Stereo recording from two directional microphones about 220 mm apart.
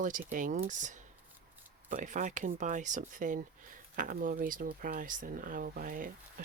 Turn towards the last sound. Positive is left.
turn(degrees=-40)  # may be behind; listen again after turning